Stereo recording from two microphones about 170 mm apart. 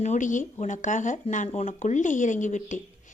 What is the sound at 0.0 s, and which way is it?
A woman's voice, 45° left (ahead or behind).